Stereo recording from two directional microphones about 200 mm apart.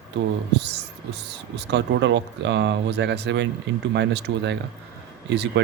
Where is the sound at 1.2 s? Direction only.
60° right (ahead or behind).